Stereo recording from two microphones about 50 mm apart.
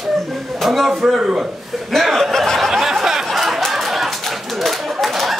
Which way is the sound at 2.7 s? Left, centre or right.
Centre.